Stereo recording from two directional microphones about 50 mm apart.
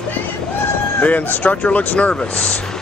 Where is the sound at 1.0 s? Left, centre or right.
Left.